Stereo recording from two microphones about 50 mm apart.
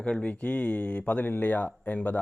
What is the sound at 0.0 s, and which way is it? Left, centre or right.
A man's voice, left.